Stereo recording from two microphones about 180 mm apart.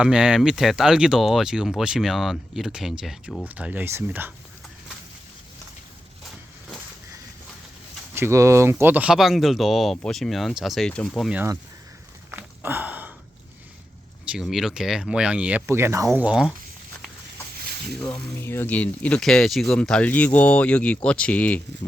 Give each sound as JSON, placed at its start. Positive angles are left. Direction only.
{"t": 0.0, "sound": "speech", "side_deg": -5}
{"t": 8.1, "sound": "speech", "side_deg": -15}
{"t": 12.3, "sound": "a sound", "side_deg": -10}
{"t": 14.3, "sound": "speech", "side_deg": -5}
{"t": 18.3, "sound": "speech", "side_deg": 15}